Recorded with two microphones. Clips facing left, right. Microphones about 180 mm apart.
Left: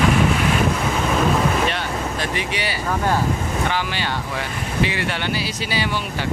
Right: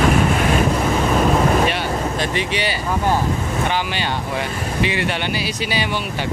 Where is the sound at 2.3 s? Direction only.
25° right (ahead or behind).